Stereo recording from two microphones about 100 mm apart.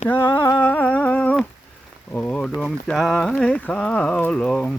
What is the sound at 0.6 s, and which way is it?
Speech, 15° left (ahead or behind).